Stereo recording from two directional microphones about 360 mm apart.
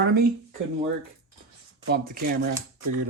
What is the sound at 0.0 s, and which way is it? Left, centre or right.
Speech, right.